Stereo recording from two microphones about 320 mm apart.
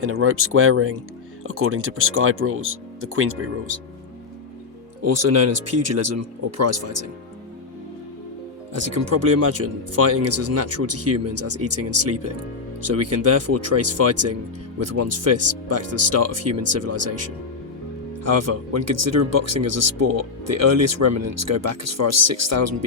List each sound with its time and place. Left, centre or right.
0.0 s speech: right
5.0 s speech: right
8.7 s speech: right